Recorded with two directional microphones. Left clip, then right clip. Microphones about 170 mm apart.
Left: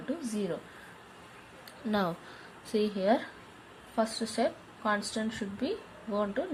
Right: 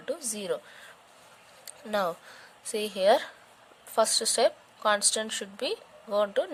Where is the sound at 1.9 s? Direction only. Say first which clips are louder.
Right 3 dB; 60° right (ahead or behind).